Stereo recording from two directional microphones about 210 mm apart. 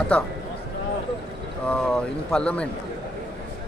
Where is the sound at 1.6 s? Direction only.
5° left (ahead or behind).